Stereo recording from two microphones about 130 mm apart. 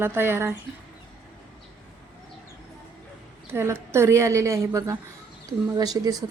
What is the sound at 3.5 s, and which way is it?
A woman's voice, 20° right (ahead or behind).